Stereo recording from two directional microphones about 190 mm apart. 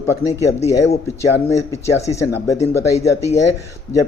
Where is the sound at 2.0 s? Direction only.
15° left (ahead or behind).